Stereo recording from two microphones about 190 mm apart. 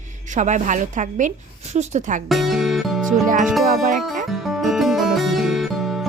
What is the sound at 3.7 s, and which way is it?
Speech, 45° right (ahead or behind).